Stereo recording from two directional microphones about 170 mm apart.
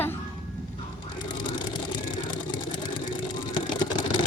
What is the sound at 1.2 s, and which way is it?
Vehicle, 25° left (ahead or behind).